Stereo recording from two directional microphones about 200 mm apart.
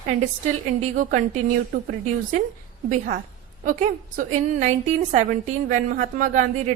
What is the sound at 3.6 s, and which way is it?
A woman's voice, 40° right (ahead or behind).